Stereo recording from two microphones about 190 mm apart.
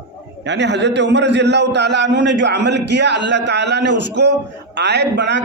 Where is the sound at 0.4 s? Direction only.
65° right (ahead or behind).